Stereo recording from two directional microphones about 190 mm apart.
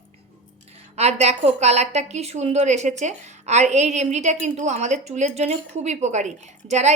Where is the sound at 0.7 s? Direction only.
35° right (ahead or behind).